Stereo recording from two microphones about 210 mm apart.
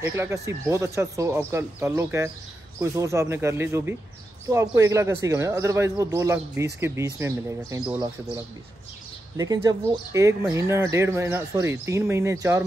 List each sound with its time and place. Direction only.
0.0 s speech: 10° right (ahead or behind)
9.4 s speech: 15° right (ahead or behind)